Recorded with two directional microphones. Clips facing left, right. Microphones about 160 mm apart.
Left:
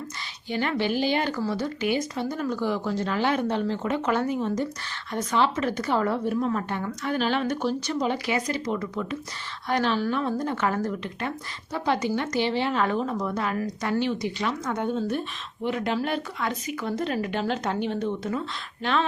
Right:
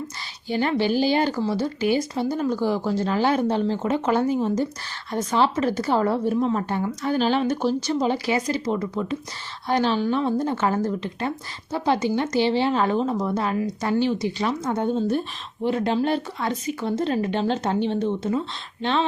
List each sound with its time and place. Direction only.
0.5 s speech: 30° right (ahead or behind)